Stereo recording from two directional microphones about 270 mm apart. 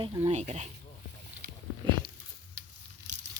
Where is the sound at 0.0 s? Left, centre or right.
Right.